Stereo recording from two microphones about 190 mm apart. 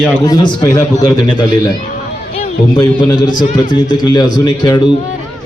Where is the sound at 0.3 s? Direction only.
20° left (ahead or behind).